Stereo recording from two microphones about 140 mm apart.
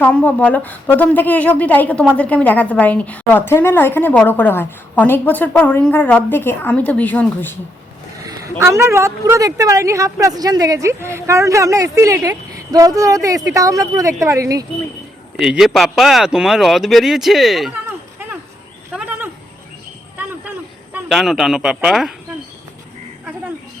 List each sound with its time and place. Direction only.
0.0 s a woman's voice: 10° left (ahead or behind)
8.2 s a woman's voice: 25° right (ahead or behind)
15.4 s speech: 5° right (ahead or behind)
18.9 s a sound: 10° right (ahead or behind)
21.1 s speech: centre (ahead or behind)